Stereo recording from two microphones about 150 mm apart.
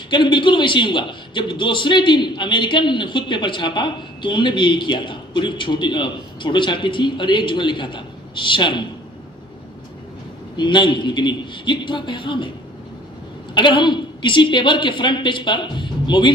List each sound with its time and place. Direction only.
0.1 s a man's voice: 30° left (ahead or behind)
10.6 s a man's voice: 30° left (ahead or behind)
13.5 s a man's voice: 30° left (ahead or behind)